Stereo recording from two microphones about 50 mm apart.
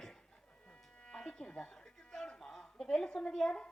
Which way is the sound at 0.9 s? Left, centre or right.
Centre.